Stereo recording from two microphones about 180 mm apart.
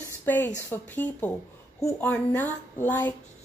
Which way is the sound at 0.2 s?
10° left (ahead or behind).